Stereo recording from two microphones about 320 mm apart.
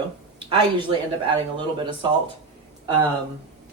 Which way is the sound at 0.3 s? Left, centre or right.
Centre.